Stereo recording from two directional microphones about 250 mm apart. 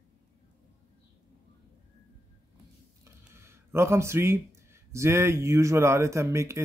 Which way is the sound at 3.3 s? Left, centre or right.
Centre.